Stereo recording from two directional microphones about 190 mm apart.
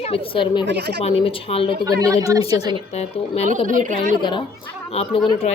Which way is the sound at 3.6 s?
45° right (ahead or behind).